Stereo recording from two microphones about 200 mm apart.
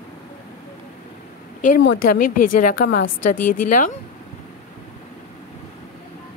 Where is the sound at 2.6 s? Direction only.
45° left (ahead or behind).